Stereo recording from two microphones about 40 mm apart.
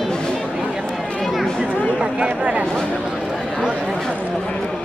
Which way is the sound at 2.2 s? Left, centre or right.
Right.